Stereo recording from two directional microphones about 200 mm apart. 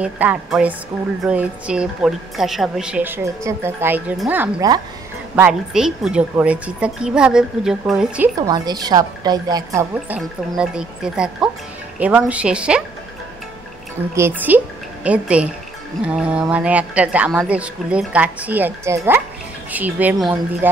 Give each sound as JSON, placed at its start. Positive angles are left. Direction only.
{"t": 0.0, "sound": "a woman's voice", "side_deg": -5}
{"t": 8.4, "sound": "a woman's voice", "side_deg": -20}
{"t": 14.1, "sound": "a woman's voice", "side_deg": -10}